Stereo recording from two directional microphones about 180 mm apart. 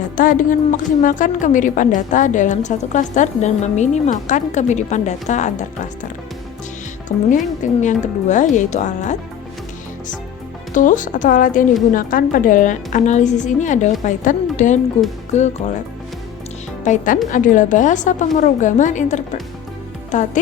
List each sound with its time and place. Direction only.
0.2 s a woman's voice: 50° left (ahead or behind)
7.3 s a woman's voice: 45° left (ahead or behind)
10.8 s a woman's voice: 45° left (ahead or behind)
16.8 s a woman's voice: 40° left (ahead or behind)